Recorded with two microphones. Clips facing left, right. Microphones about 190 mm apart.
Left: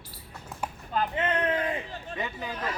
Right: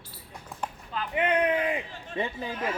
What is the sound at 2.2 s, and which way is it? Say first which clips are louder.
Speech: right 4 dB; 30° right (ahead or behind).